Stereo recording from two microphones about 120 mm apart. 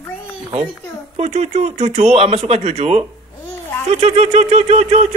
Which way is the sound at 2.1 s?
60° right (ahead or behind).